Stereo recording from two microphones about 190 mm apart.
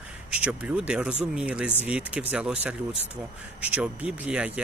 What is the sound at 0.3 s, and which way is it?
Speech, 5° right (ahead or behind).